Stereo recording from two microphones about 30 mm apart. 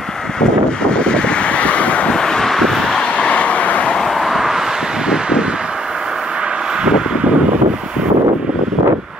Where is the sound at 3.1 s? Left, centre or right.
Left.